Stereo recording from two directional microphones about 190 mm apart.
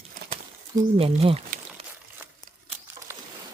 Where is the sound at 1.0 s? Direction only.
30° right (ahead or behind).